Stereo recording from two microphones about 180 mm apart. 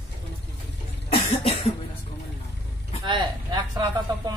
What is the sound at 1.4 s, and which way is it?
Cough, 30° left (ahead or behind).